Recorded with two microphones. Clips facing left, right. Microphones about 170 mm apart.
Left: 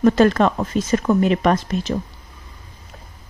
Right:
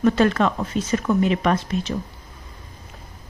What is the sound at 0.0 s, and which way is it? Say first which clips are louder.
Speech: left 3 dB; 40° left (ahead or behind).